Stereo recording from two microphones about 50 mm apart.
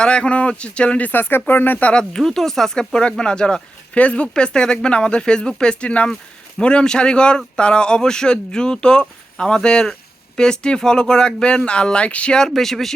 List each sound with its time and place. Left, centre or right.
0.0 s speech: centre
1.1 s speech: left
1.9 s speech: centre
2.2 s speech: centre; by 12.4 s left
12.4 s speech: centre